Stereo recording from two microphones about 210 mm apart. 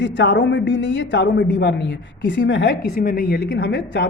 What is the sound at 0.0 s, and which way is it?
A woman's voice, 60° left (ahead or behind).